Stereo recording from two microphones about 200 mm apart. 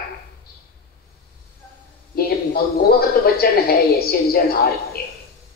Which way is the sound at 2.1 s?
50° left (ahead or behind).